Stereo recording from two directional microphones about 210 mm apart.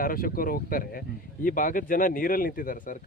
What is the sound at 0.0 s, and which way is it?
Speech, 45° left (ahead or behind).